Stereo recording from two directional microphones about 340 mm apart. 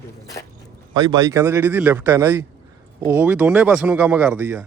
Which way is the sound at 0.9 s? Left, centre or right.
Centre.